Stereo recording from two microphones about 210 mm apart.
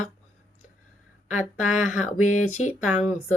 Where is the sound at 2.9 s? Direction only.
5° right (ahead or behind).